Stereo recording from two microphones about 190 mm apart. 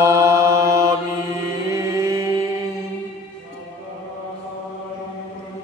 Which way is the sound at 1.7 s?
15° right (ahead or behind).